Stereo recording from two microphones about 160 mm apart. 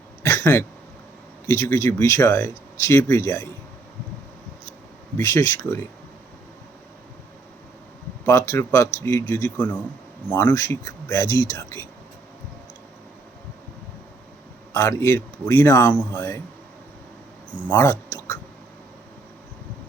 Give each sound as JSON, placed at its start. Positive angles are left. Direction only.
{"t": 0.2, "sound": "a sound", "side_deg": 15}
{"t": 1.5, "sound": "speech", "side_deg": 20}
{"t": 5.1, "sound": "speech", "side_deg": 20}
{"t": 8.3, "sound": "speech", "side_deg": 15}
{"t": 14.7, "sound": "speech", "side_deg": 15}
{"t": 17.7, "sound": "speech", "side_deg": 15}